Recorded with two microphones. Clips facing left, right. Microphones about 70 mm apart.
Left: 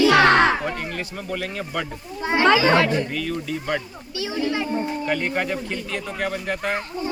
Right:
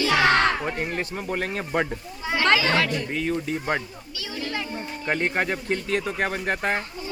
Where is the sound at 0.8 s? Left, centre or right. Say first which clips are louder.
Right 2 dB; right.